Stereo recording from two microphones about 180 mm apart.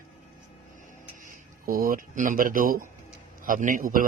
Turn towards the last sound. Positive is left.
turn(degrees=-50)  # may be behind; listen again after turning